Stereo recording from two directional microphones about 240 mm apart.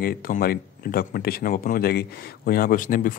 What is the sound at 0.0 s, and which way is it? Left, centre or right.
Speech, left.